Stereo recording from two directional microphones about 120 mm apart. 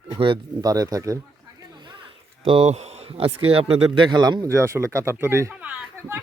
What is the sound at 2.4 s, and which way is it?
Speech, 50° right (ahead or behind).